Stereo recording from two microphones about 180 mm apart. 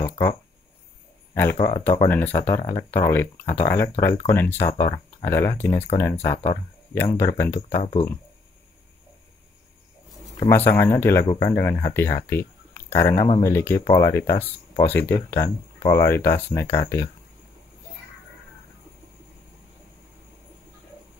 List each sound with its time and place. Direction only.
1.3 s speech: 15° left (ahead or behind)
6.3 s speech: 35° left (ahead or behind)
7.0 s speech: 15° left (ahead or behind)
10.5 s speech: 10° left (ahead or behind)